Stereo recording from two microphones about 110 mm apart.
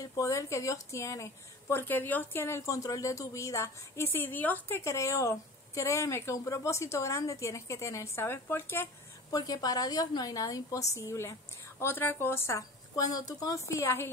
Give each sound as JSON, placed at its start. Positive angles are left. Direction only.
{"t": 0.0, "sound": "a woman's voice", "side_deg": 30}
{"t": 9.3, "sound": "a woman's voice", "side_deg": 35}